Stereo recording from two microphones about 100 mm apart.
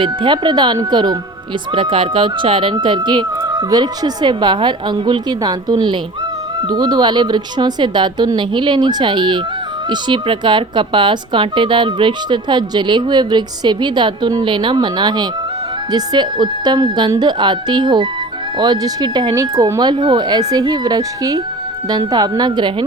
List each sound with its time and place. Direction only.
0.0 s speech: 50° right (ahead or behind)
1.7 s speech: 55° right (ahead or behind)
19.3 s speech: 35° right (ahead or behind)
19.9 s speech: 50° right (ahead or behind)